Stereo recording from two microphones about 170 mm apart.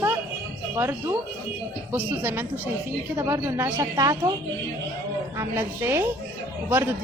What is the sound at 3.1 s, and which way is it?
A woman's voice, 15° right (ahead or behind).